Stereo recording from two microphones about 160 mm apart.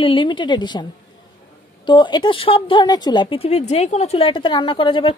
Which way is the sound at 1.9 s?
30° left (ahead or behind).